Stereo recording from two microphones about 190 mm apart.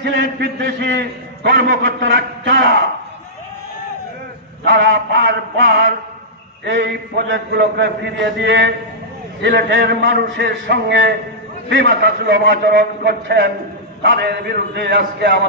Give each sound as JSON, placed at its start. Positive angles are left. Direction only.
{"t": 0.0, "sound": "a man's voice", "side_deg": -65}
{"t": 4.6, "sound": "mantra", "side_deg": -75}
{"t": 6.6, "sound": "a man's voice", "side_deg": -65}